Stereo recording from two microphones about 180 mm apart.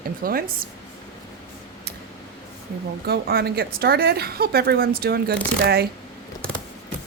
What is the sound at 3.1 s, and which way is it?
A woman's voice, 60° right (ahead or behind).